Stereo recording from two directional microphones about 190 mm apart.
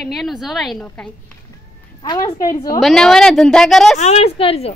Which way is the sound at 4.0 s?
35° left (ahead or behind).